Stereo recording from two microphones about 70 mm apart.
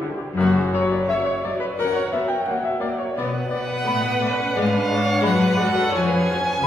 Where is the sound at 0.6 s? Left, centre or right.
Left.